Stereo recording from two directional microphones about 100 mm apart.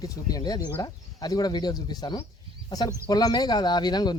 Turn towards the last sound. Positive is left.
turn(degrees=45)  # may be behind; listen again after turning